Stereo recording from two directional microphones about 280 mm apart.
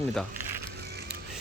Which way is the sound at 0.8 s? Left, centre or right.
Right.